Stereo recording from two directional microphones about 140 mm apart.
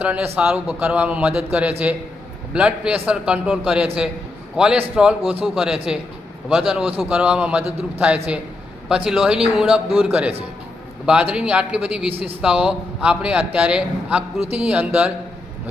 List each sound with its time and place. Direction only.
0.0 s a man's voice: 10° right (ahead or behind)
12.1 s speech: 45° right (ahead or behind)
12.4 s a man's voice: 5° right (ahead or behind)